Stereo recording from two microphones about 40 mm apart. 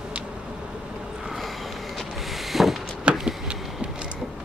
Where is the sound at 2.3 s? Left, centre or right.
Centre.